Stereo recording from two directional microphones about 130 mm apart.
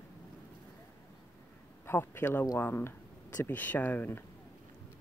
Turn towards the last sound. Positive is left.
turn(degrees=15)  # may be behind; listen again after turning